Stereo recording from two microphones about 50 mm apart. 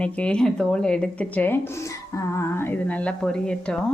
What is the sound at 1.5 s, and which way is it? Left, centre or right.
Speech, left.